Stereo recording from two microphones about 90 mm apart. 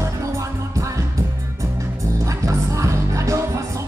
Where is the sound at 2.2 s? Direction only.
35° right (ahead or behind).